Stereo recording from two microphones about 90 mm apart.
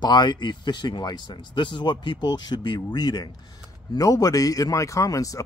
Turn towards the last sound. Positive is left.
turn(degrees=40)  # may be behind; listen again after turning